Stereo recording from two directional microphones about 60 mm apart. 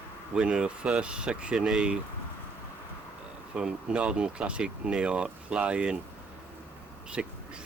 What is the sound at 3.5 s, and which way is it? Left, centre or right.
Speech, centre.